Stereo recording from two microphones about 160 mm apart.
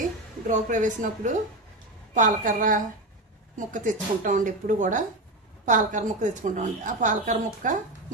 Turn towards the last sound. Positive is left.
turn(degrees=-55)  # may be behind; listen again after turning